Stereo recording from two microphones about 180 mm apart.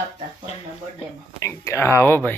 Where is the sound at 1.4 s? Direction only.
15° left (ahead or behind).